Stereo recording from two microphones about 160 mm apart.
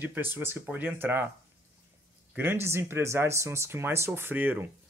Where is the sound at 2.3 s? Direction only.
15° right (ahead or behind).